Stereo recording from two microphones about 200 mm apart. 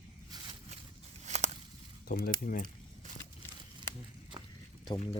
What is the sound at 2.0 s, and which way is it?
Speech, 50° left (ahead or behind).